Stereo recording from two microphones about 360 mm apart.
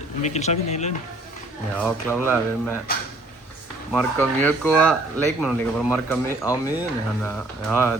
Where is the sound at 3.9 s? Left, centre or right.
Centre.